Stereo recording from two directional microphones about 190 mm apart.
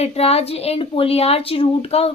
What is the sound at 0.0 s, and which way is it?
Speech, 30° left (ahead or behind).